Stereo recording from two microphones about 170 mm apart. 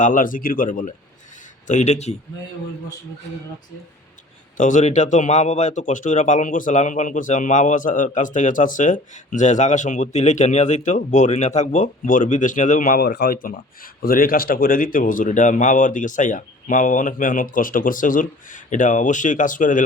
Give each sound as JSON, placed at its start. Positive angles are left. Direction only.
{"t": 0.0, "sound": "a man's voice", "side_deg": 50}
{"t": 4.5, "sound": "speech", "side_deg": 45}